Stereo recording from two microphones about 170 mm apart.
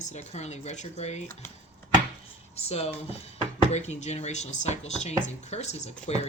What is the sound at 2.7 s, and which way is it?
Speech, 35° left (ahead or behind).